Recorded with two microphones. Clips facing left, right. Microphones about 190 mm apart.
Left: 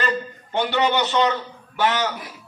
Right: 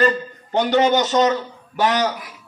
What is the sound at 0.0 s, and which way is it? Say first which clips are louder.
A man's voice: right 6 dB; 40° right (ahead or behind).